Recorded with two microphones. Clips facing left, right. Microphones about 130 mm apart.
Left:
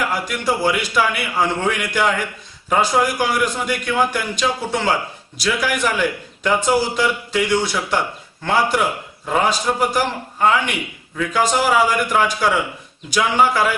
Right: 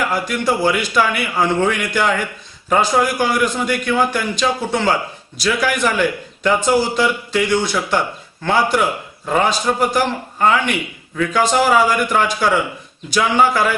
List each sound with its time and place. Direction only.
0.0 s a man's voice: 10° left (ahead or behind)